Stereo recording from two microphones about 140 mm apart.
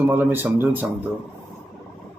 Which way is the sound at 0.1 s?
15° right (ahead or behind).